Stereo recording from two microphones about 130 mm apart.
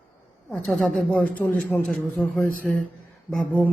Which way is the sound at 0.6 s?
Centre (ahead or behind).